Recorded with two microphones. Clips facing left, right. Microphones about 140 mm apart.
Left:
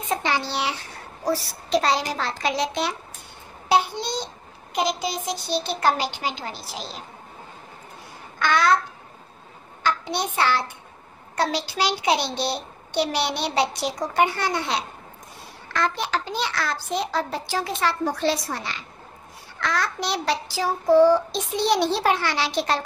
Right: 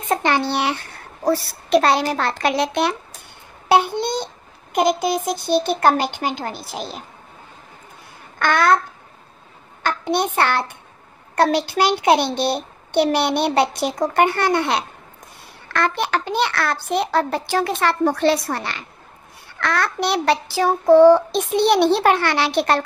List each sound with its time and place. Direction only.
0.1 s a child's voice: 60° right (ahead or behind)
8.4 s a child's voice: 55° right (ahead or behind)
9.8 s a child's voice: 55° right (ahead or behind)